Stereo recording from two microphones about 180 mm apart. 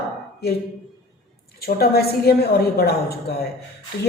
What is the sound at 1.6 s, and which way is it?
Speech, 60° left (ahead or behind).